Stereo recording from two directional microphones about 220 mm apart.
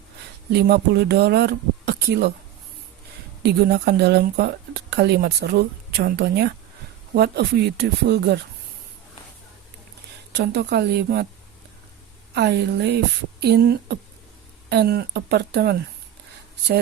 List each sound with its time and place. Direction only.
0.5 s speech: 50° right (ahead or behind)
3.4 s speech: 50° right (ahead or behind)
10.3 s speech: 50° right (ahead or behind)
12.3 s speech: 50° right (ahead or behind)